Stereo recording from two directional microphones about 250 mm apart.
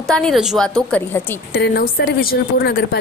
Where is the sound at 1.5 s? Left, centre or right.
Left.